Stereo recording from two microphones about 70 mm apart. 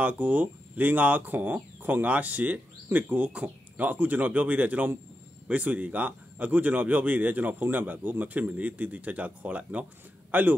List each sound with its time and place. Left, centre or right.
0.0 s speech: right